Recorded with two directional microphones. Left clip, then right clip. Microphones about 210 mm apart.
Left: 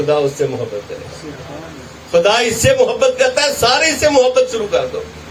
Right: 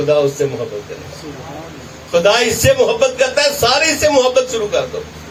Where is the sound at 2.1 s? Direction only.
35° left (ahead or behind).